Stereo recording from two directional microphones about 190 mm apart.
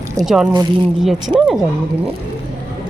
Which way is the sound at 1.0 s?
Centre (ahead or behind).